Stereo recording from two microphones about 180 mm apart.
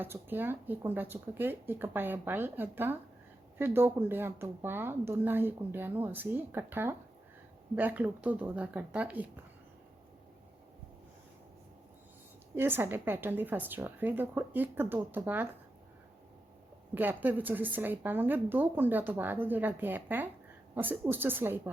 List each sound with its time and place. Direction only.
0.0 s speech: 10° right (ahead or behind)
12.5 s speech: 10° right (ahead or behind)
16.9 s speech: 10° right (ahead or behind)